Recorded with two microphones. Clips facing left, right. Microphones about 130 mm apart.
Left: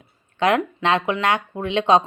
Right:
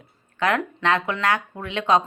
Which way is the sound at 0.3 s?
20° left (ahead or behind).